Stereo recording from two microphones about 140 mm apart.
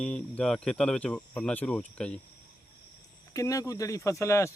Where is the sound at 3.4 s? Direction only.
25° left (ahead or behind).